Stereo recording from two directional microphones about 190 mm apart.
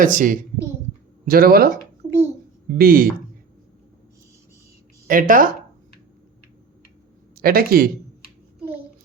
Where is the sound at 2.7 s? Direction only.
50° right (ahead or behind).